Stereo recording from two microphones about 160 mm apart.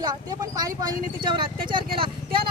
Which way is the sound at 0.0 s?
25° right (ahead or behind).